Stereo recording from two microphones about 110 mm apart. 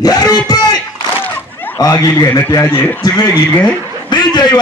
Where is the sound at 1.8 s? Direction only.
30° left (ahead or behind).